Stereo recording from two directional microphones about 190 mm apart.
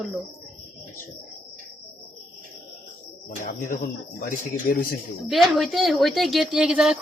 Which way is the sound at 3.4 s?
45° left (ahead or behind).